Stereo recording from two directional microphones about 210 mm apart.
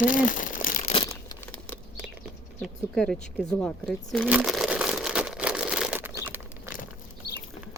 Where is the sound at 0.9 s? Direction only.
20° left (ahead or behind).